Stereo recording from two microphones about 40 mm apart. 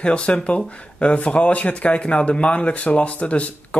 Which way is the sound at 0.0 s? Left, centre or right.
Left.